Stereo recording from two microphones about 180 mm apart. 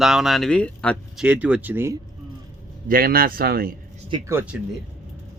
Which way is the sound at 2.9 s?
55° right (ahead or behind).